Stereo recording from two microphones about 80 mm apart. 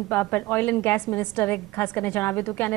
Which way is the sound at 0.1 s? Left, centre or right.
Left.